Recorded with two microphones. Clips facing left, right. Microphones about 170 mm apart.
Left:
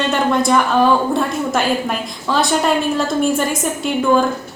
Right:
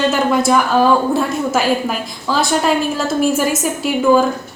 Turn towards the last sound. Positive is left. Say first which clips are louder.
# right 2 dB
turn(degrees=-5)  # may be behind; listen again after turning